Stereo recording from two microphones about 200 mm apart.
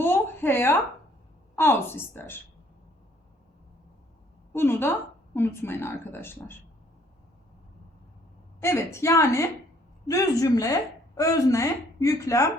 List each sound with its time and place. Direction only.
0.0 s a sound: 10° left (ahead or behind)
1.5 s a woman's voice: 10° left (ahead or behind)
4.5 s a woman's voice: 10° left (ahead or behind)
8.6 s a woman's voice: 15° left (ahead or behind)